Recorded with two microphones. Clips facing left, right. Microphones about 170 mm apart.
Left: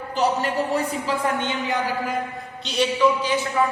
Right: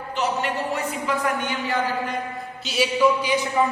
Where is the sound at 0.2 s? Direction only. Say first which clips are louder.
Left 3 dB; 35° left (ahead or behind); by 1.8 s 20° left (ahead or behind).